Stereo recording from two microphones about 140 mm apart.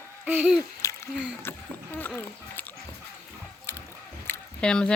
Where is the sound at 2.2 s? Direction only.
10° left (ahead or behind).